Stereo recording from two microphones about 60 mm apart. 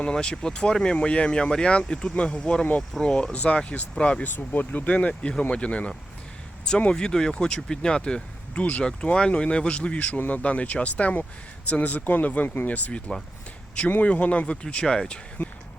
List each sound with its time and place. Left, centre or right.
0.0 s speech: centre
4.2 s speech: left
15.4 s a sound: left